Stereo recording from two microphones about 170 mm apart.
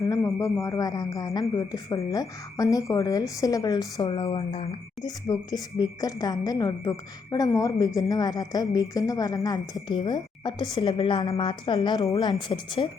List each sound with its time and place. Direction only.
0.0 s speech: 20° left (ahead or behind); by 4.8 s 35° left (ahead or behind)
5.0 s speech: 20° left (ahead or behind)